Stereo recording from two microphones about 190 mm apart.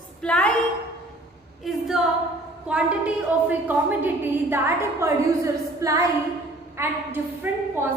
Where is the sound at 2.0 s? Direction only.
5° right (ahead or behind).